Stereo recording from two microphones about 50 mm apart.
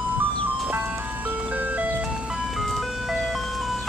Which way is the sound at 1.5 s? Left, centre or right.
Right.